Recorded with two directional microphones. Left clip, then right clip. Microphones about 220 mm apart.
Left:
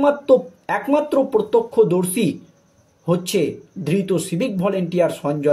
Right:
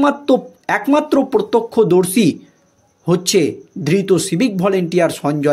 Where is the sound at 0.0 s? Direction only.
45° right (ahead or behind).